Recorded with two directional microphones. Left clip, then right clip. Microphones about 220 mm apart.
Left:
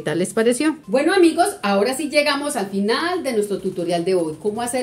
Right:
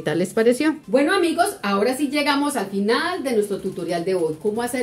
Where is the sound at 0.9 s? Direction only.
30° left (ahead or behind).